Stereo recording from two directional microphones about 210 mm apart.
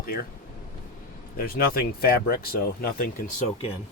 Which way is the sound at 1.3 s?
45° left (ahead or behind).